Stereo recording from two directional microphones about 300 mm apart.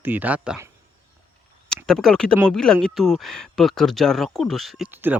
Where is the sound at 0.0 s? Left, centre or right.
Centre.